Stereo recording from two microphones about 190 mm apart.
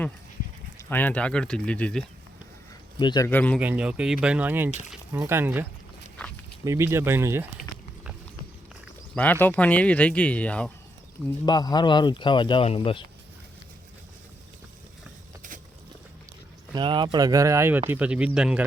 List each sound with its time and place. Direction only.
0.9 s speech: 10° left (ahead or behind)
3.0 s speech: 25° left (ahead or behind)
3.2 s speech: 10° left (ahead or behind)
3.6 s speech: 5° right (ahead or behind)
6.7 s speech: 15° right (ahead or behind)
9.1 s speech: 10° left (ahead or behind)
11.4 s speech: 20° left (ahead or behind)
16.7 s speech: 25° right (ahead or behind); by 18.6 s 5° right (ahead or behind)